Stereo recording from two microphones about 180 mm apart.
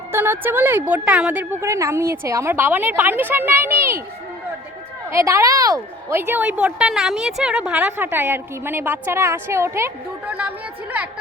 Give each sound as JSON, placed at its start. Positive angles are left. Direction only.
{"t": 0.1, "sound": "a woman's voice", "side_deg": -10}
{"t": 5.1, "sound": "a woman's voice", "side_deg": -15}